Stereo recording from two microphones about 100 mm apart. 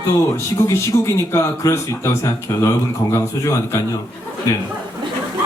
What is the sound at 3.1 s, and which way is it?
Speech, 30° left (ahead or behind).